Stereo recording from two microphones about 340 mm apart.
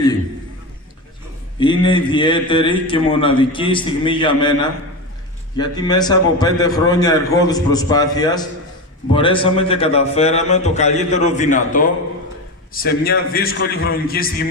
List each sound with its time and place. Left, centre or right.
1.6 s a man's voice: centre